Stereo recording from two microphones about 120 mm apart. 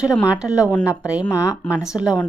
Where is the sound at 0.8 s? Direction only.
20° left (ahead or behind).